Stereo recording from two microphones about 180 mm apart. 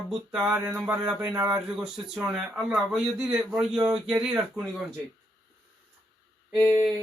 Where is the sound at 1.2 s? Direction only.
20° right (ahead or behind).